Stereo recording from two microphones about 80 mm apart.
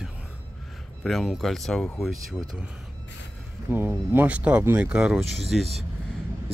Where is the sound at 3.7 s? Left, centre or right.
Right.